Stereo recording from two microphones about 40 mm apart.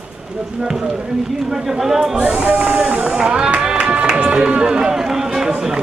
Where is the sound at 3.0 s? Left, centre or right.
Centre.